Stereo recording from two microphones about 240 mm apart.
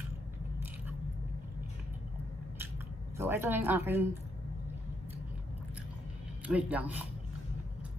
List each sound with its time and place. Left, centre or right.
3.2 s a woman's voice: centre
6.4 s a woman's voice: centre